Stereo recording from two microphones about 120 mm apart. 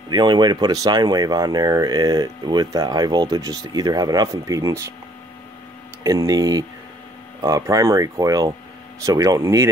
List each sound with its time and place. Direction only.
0.1 s speech: 35° right (ahead or behind)
6.0 s speech: 30° right (ahead or behind)